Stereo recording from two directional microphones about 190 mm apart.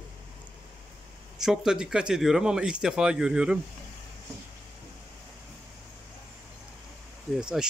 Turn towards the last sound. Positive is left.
turn(degrees=-5)  # may be behind; listen again after turning